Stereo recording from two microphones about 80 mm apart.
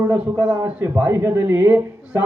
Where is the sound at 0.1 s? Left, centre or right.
Right.